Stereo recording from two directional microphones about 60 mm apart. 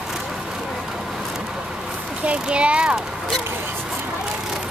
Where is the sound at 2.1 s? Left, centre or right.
Centre.